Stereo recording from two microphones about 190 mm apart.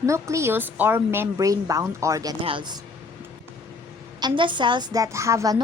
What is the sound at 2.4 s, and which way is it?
Speech, 25° right (ahead or behind).